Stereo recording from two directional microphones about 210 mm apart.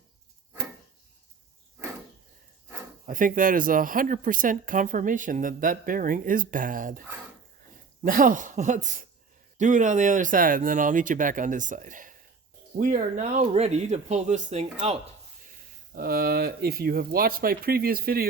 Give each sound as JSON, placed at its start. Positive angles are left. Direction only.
{"t": 3.1, "sound": "speech", "side_deg": -40}
{"t": 8.0, "sound": "speech", "side_deg": -40}
{"t": 16.0, "sound": "speech", "side_deg": -45}